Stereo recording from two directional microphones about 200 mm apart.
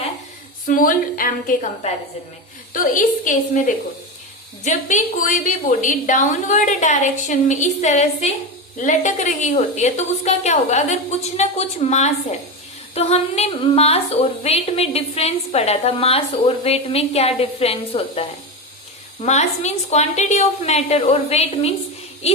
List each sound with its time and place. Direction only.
0.7 s a woman's voice: 45° left (ahead or behind)
4.6 s speech: 40° left (ahead or behind)